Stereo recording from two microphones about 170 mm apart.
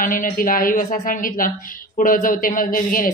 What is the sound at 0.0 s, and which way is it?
A woman's voice, 55° left (ahead or behind).